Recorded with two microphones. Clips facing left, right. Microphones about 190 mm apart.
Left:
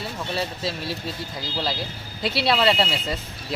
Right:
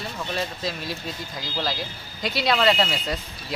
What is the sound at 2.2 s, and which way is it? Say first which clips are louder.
Speech: left 2 dB; 30° left (ahead or behind).